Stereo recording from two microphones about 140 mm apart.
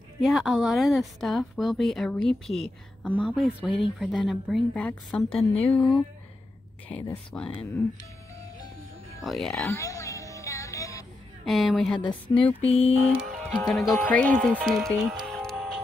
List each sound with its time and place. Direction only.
0.2 s speech: 5° right (ahead or behind)
6.9 s speech: 15° left (ahead or behind)
9.2 s speech: centre (ahead or behind)
9.7 s music: 20° left (ahead or behind)
11.4 s speech: centre (ahead or behind)
12.6 s mantra: 45° left (ahead or behind)
13.1 s speech: 5° right (ahead or behind)
13.5 s speech: 5° left (ahead or behind)
14.5 s speech: 5° right (ahead or behind)
15.3 s music: 5° left (ahead or behind)